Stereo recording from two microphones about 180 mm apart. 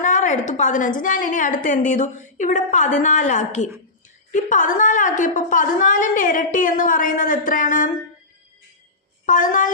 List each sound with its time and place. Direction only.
0.0 s a woman's voice: 45° left (ahead or behind)
9.2 s a woman's voice: 45° left (ahead or behind)